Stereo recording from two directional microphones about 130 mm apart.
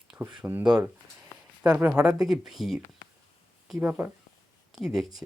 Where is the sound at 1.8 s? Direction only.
10° right (ahead or behind).